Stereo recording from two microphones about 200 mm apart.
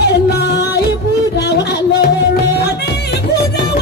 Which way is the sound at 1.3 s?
55° left (ahead or behind).